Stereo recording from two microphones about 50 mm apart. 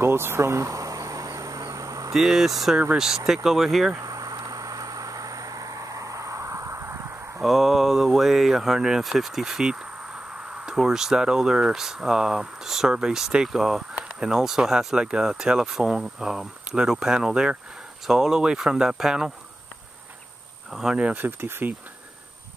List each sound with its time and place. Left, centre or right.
0.0 s a sound: right
2.1 s speech: centre
5.8 s a sound: right
7.4 s speech: centre
20.7 s speech: centre
21.2 s speech: right